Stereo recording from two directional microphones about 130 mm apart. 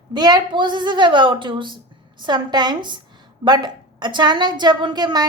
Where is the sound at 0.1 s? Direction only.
35° right (ahead or behind).